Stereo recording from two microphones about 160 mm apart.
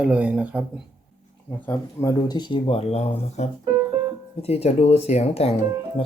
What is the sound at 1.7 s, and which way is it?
Speech, 20° left (ahead or behind).